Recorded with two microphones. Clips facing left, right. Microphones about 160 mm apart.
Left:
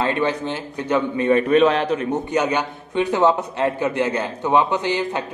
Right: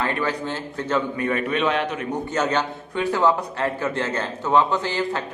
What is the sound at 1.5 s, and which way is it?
Speech, 35° left (ahead or behind).